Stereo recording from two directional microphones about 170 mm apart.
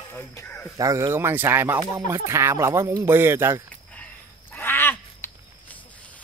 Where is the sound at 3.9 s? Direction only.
10° left (ahead or behind).